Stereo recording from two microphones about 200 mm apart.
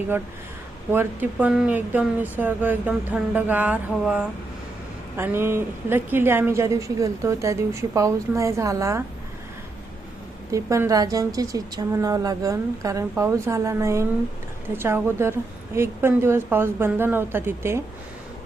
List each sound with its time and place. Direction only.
0.9 s a woman's voice: 10° right (ahead or behind)
10.5 s a woman's voice: 15° right (ahead or behind)